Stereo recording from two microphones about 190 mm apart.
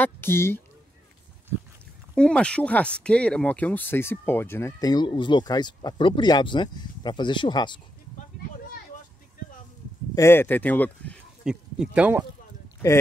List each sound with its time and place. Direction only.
0.0 s speech: 10° left (ahead or behind)
2.1 s speech: 5° left (ahead or behind); by 7.8 s 25° left (ahead or behind)
10.1 s speech: 15° left (ahead or behind)
11.4 s speech: 5° right (ahead or behind)